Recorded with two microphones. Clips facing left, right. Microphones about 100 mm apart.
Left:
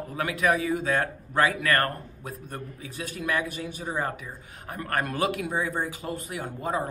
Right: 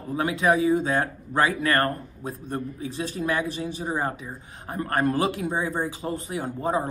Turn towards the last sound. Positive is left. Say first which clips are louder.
# right 4 dB
turn(degrees=-30)  # may be behind; listen again after turning